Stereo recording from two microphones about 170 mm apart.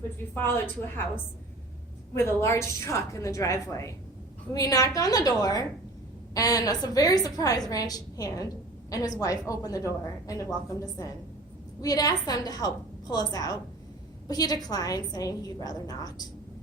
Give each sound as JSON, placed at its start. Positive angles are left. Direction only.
{"t": 2.1, "sound": "a woman's voice", "side_deg": 15}